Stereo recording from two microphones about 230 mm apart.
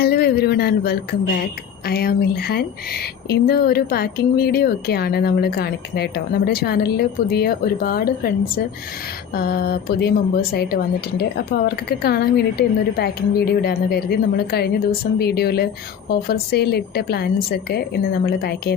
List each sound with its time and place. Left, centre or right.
0.0 s speech: left